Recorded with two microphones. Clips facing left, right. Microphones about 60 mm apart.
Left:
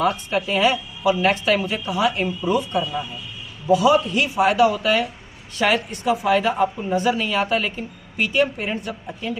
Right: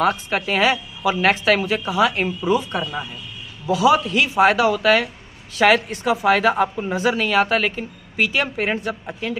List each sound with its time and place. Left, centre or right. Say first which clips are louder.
0.0 s a woman's voice: right 1 dB; right
5.6 s speech: right 5 dB; right
6.0 s speech: right 2 dB; right
9.0 s speech: right 2 dB; right